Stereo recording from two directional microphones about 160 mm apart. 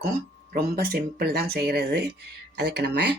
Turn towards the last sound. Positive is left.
turn(degrees=-90)